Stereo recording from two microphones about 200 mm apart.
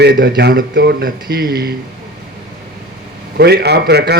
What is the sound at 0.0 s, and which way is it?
A man's voice, 55° right (ahead or behind).